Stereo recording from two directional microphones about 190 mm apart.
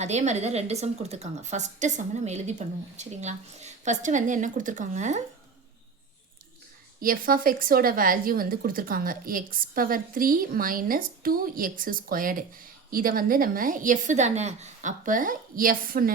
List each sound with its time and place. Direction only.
0.0 s a woman's voice: 35° right (ahead or behind)
7.0 s a woman's voice: 50° right (ahead or behind)